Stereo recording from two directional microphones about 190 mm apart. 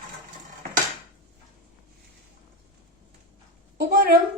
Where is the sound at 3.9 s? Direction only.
55° right (ahead or behind).